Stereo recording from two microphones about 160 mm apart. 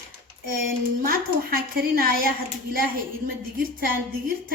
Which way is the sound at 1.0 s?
65° right (ahead or behind).